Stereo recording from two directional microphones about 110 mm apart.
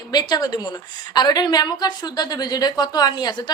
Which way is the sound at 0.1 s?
40° left (ahead or behind).